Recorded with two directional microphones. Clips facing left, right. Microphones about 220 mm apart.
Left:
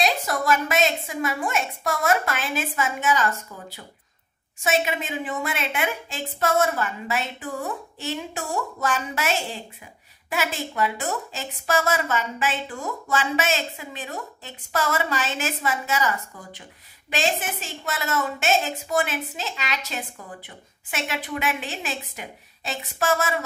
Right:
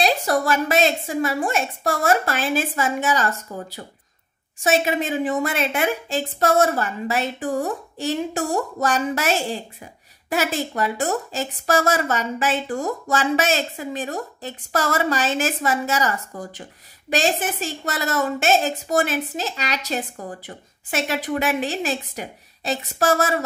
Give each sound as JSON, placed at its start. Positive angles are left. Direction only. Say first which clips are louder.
{"t": 0.0, "sound": "a woman's voice", "louder": "right 4 dB", "side_deg": -35}
{"t": 10.3, "sound": "a woman's voice", "louder": "right 4 dB", "side_deg": -40}